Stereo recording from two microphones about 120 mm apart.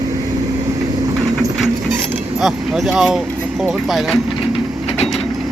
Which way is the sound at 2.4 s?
5° right (ahead or behind).